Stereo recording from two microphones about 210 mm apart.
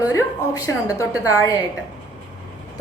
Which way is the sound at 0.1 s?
15° left (ahead or behind).